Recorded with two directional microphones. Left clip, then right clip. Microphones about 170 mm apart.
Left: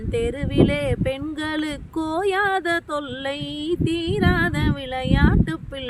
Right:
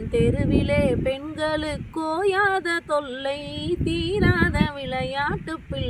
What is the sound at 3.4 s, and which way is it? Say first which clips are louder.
Female singing: left 2 dB; 35° left (ahead or behind).